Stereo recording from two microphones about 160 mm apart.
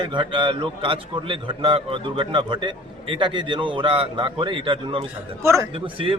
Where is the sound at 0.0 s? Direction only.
30° right (ahead or behind).